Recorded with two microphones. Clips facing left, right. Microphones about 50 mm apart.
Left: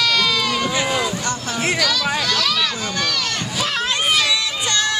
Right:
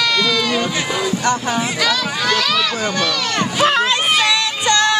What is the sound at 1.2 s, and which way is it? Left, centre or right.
Speech, right.